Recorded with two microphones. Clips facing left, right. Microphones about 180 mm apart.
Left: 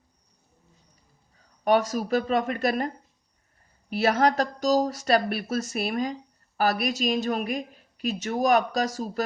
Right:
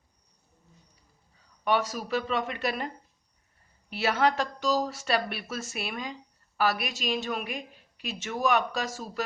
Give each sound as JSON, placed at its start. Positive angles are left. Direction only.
{"t": 1.6, "sound": "speech", "side_deg": 45}